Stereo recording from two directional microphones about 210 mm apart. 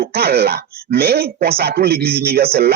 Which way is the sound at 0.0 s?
50° right (ahead or behind).